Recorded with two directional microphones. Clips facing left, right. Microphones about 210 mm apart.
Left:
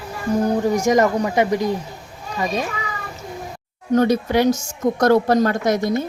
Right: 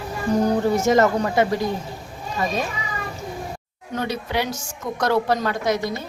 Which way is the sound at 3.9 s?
45° left (ahead or behind).